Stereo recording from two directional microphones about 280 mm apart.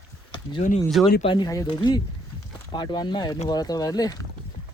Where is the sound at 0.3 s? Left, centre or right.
Left.